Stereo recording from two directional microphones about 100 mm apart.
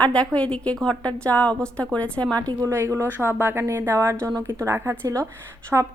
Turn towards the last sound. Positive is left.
turn(degrees=-15)  # may be behind; listen again after turning